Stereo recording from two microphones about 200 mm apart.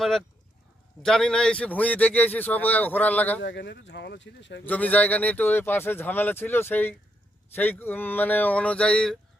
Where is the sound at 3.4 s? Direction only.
60° left (ahead or behind).